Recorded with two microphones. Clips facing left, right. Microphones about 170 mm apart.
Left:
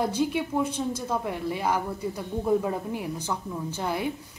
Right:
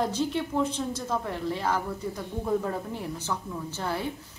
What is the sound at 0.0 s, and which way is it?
A woman's voice, 10° left (ahead or behind).